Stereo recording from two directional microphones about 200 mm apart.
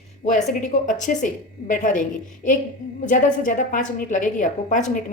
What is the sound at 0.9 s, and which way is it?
A woman's voice, 40° left (ahead or behind).